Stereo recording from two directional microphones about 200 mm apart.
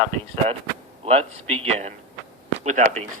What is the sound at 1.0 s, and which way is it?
Speech, 30° right (ahead or behind).